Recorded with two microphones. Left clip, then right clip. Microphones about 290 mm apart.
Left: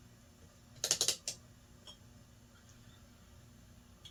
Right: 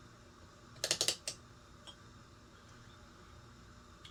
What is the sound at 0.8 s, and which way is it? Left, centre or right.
Typing, right.